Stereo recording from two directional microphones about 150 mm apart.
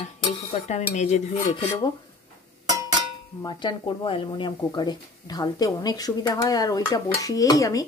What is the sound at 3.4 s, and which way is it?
Speech, 30° left (ahead or behind).